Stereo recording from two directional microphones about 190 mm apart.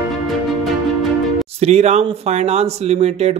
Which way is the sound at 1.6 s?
35° right (ahead or behind).